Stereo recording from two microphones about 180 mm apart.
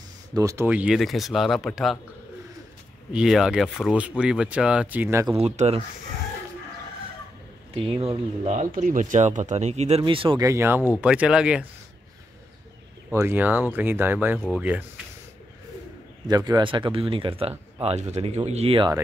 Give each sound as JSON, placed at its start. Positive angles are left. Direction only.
{"t": 0.3, "sound": "speech", "side_deg": -20}
{"t": 3.1, "sound": "speech", "side_deg": -5}
{"t": 5.4, "sound": "speech", "side_deg": -35}
{"t": 7.7, "sound": "speech", "side_deg": -30}
{"t": 10.4, "sound": "speech", "side_deg": -15}
{"t": 13.1, "sound": "speech", "side_deg": -15}
{"t": 16.3, "sound": "speech", "side_deg": -20}